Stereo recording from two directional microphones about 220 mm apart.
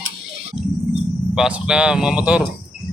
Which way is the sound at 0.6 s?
35° right (ahead or behind).